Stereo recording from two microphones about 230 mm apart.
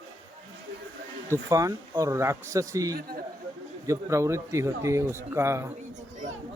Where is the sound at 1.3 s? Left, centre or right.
Centre.